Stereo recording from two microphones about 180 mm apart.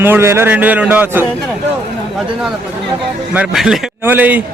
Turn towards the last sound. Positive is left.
turn(degrees=-10)  # may be behind; listen again after turning